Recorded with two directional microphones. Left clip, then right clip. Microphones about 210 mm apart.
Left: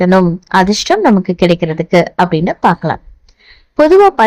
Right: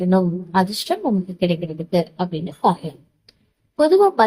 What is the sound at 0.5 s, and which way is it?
A woman's voice, 35° left (ahead or behind).